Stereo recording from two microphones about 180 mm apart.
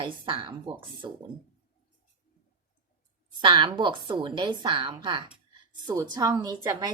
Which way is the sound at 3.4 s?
25° right (ahead or behind).